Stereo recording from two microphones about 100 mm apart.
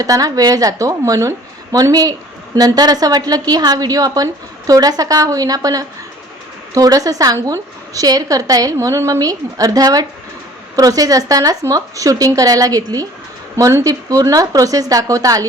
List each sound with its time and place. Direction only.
0.0 s a woman's voice: 40° right (ahead or behind)